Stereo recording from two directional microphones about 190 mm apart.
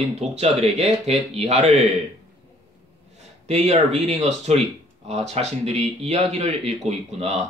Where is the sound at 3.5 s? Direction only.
35° right (ahead or behind).